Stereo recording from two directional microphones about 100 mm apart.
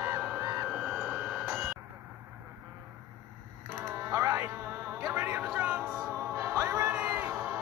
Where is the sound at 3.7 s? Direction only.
25° right (ahead or behind).